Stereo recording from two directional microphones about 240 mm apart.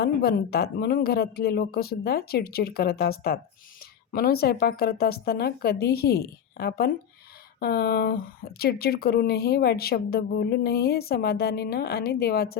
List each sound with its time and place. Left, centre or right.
0.0 s speech: left